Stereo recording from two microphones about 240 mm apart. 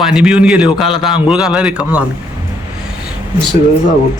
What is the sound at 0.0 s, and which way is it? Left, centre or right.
Speech, centre.